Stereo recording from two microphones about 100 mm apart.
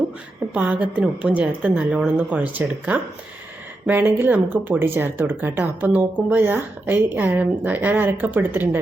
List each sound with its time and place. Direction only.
0.5 s a woman's voice: 15° right (ahead or behind)